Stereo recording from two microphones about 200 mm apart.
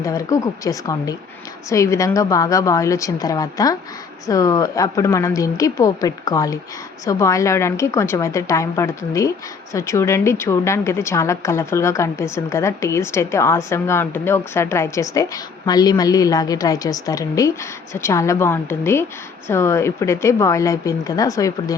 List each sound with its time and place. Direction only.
0.0 s a woman's voice: 15° left (ahead or behind)